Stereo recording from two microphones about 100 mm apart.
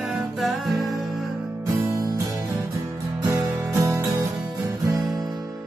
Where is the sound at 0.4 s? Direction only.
Centre (ahead or behind).